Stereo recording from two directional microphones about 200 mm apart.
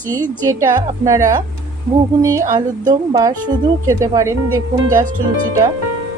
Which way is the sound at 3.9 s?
15° right (ahead or behind).